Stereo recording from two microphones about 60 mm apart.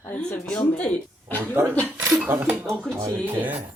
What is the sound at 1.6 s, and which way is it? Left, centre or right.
Speech, right.